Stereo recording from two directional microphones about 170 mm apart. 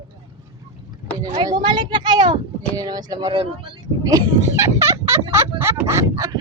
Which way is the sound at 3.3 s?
35° right (ahead or behind).